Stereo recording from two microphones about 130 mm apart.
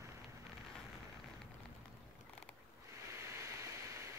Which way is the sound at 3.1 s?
20° right (ahead or behind).